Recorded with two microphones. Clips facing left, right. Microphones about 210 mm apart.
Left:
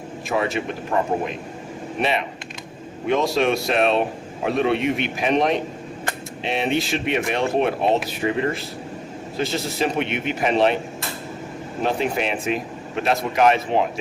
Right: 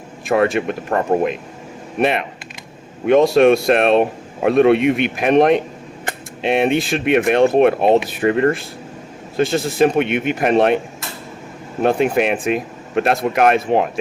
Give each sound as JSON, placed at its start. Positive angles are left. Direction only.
{"t": 0.3, "sound": "speech", "side_deg": -55}
{"t": 11.8, "sound": "speech", "side_deg": -55}